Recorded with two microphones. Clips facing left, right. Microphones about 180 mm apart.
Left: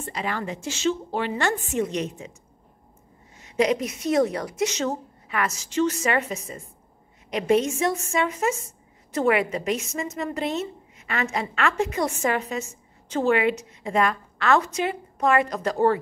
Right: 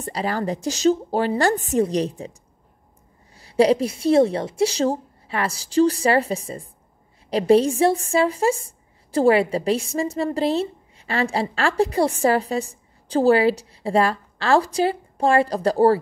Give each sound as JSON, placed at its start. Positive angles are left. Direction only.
{"t": 0.0, "sound": "a woman's voice", "side_deg": -35}
{"t": 3.3, "sound": "a woman's voice", "side_deg": -35}